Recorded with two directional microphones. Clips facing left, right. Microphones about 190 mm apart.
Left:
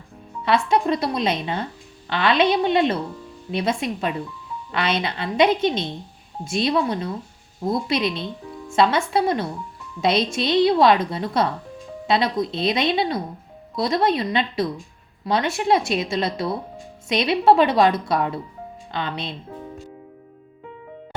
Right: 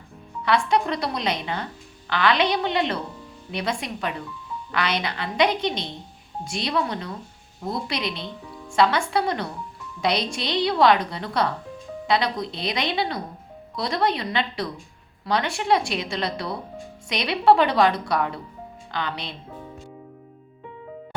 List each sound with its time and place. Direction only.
0.4 s a woman's voice: 25° left (ahead or behind)